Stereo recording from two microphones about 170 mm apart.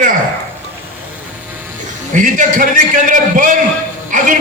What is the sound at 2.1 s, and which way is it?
A man's voice, 50° right (ahead or behind).